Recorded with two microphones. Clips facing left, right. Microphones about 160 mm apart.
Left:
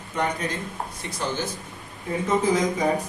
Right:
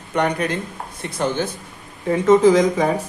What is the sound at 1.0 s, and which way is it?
Speech, 55° right (ahead or behind).